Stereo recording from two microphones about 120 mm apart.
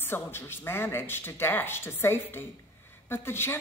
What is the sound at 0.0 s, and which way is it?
A woman's voice, 20° left (ahead or behind).